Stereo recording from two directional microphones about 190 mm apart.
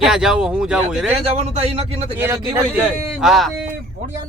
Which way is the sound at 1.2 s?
35° right (ahead or behind).